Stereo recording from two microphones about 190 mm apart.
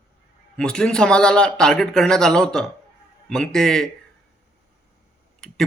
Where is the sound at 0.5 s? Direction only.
5° left (ahead or behind).